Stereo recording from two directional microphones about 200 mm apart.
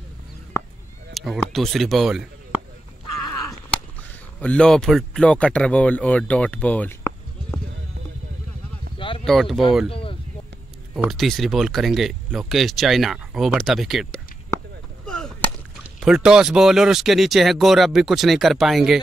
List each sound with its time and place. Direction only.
1.1 s speech: centre (ahead or behind)
4.4 s speech: 5° left (ahead or behind)
8.9 s a sound: 25° left (ahead or behind)
9.2 s speech: centre (ahead or behind)
9.8 s a sound: 30° left (ahead or behind)
11.1 s speech: centre (ahead or behind)
15.0 s whip: 5° left (ahead or behind)
16.0 s speech: 5° right (ahead or behind)